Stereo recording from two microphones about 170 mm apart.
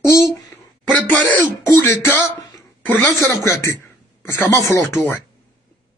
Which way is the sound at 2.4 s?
25° left (ahead or behind).